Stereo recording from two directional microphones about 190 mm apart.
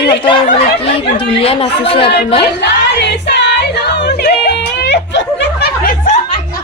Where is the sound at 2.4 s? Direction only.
65° left (ahead or behind).